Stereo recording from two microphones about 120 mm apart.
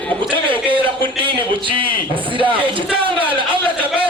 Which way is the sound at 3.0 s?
45° right (ahead or behind).